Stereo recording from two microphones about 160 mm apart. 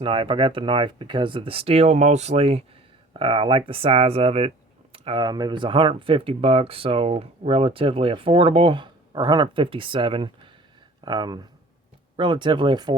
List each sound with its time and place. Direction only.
0.0 s speech: 35° right (ahead or behind)